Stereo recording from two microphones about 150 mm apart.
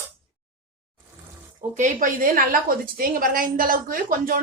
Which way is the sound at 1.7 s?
60° right (ahead or behind).